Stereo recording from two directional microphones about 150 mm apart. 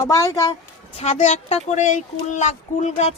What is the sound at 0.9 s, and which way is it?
Speech, 45° left (ahead or behind).